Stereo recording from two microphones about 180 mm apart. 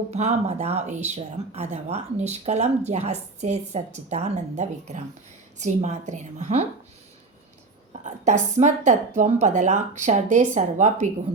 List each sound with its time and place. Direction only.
0.1 s speech: 35° right (ahead or behind)
8.0 s speech: 40° right (ahead or behind)